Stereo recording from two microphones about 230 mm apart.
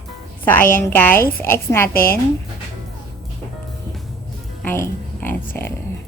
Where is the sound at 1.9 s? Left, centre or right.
Left.